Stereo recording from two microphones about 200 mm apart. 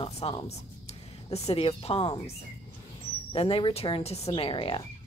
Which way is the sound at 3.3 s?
25° left (ahead or behind).